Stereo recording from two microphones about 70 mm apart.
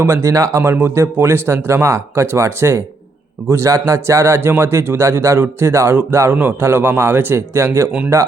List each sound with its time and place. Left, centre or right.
0.0 s speech: right
0.6 s speech: right